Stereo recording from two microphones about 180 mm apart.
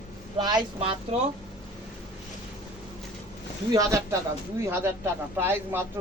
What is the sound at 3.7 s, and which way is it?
A man's voice, 20° right (ahead or behind).